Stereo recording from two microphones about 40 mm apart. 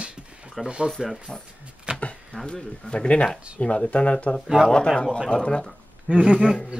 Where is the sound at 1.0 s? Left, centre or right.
Centre.